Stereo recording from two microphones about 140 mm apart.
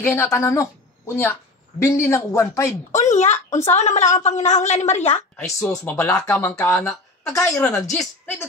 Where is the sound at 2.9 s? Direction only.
55° left (ahead or behind).